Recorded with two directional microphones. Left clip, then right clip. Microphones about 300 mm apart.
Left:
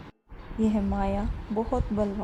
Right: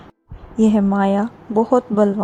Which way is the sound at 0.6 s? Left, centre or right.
Right.